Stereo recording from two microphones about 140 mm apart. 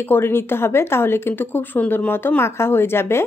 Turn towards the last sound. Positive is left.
turn(degrees=15)  # may be behind; listen again after turning